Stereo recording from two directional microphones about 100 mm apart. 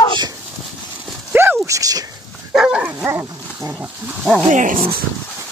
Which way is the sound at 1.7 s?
35° right (ahead or behind).